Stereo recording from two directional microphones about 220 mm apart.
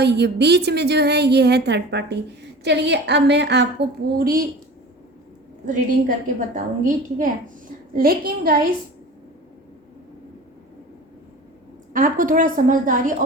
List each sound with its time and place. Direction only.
0.0 s a woman's voice: 50° right (ahead or behind)
5.6 s a woman's voice: 35° right (ahead or behind)
11.9 s a woman's voice: 35° right (ahead or behind)